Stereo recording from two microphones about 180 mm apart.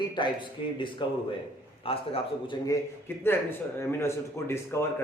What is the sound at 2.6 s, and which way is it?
A man's voice, 15° left (ahead or behind).